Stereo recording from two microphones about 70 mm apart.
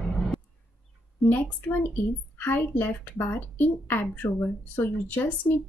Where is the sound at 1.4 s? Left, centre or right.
Left.